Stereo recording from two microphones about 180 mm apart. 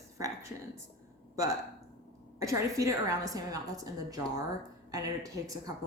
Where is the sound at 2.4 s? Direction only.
15° right (ahead or behind).